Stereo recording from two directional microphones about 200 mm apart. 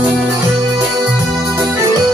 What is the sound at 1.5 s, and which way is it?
Music, 15° right (ahead or behind).